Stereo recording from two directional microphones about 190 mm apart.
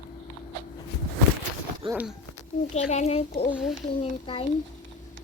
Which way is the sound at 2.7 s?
35° left (ahead or behind).